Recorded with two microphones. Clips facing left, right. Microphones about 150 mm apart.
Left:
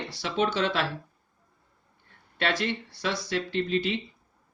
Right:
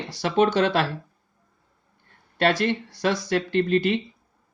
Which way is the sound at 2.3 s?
40° right (ahead or behind).